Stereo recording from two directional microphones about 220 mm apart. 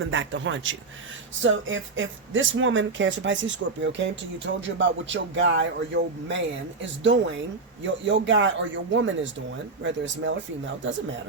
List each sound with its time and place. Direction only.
0.1 s speech: 55° right (ahead or behind)